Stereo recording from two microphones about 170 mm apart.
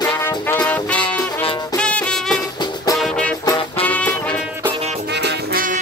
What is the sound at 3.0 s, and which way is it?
Music, 5° left (ahead or behind).